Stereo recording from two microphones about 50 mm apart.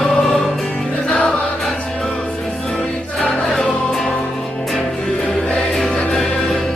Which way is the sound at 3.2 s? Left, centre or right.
Centre.